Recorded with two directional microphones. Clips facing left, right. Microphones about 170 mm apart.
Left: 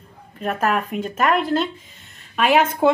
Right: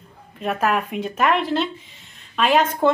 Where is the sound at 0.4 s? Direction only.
Centre (ahead or behind).